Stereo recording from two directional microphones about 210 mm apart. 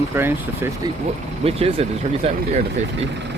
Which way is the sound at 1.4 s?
30° right (ahead or behind).